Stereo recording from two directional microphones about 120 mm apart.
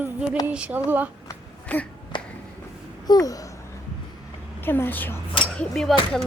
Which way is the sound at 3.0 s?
30° left (ahead or behind).